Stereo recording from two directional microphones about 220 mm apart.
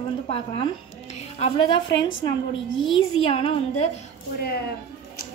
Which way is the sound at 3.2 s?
25° left (ahead or behind).